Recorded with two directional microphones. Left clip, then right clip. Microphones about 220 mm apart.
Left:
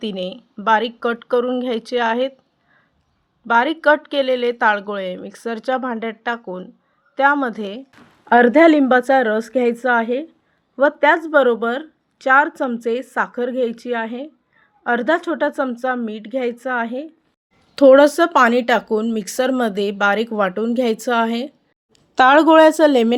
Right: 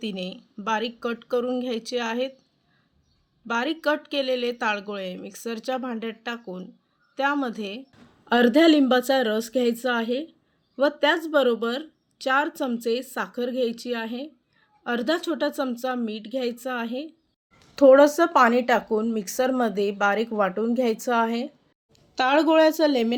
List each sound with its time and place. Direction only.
0.0 s speech: 5° left (ahead or behind)
3.4 s speech: 5° left (ahead or behind)
17.7 s speech: 35° left (ahead or behind)